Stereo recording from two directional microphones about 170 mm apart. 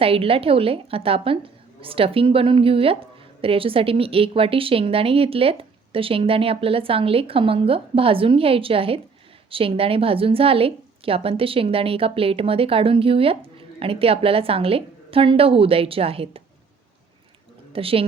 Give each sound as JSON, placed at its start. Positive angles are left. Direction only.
{"t": 0.0, "sound": "a woman's voice", "side_deg": -35}
{"t": 17.7, "sound": "speech", "side_deg": -35}